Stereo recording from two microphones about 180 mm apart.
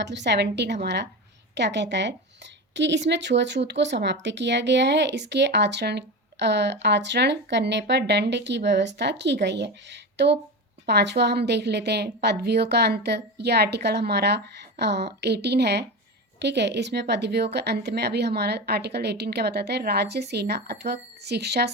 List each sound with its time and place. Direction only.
0.0 s speech: 70° right (ahead or behind)